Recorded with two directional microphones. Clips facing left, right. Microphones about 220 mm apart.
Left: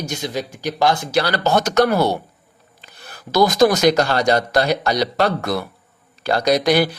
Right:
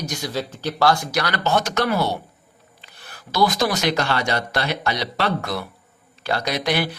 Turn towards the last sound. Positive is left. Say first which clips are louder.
# left 7 dB
turn(degrees=40)  # may be behind; listen again after turning